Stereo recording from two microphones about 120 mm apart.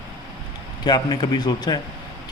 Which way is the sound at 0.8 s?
35° left (ahead or behind).